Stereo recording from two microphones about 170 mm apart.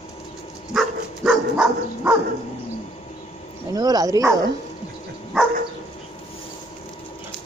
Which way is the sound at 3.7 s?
20° right (ahead or behind).